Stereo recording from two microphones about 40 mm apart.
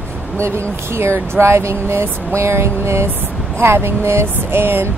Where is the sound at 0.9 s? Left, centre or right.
Right.